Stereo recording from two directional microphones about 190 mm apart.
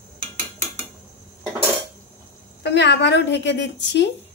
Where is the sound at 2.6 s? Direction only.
65° left (ahead or behind).